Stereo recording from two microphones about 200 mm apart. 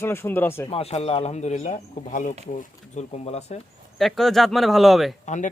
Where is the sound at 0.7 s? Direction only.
30° left (ahead or behind).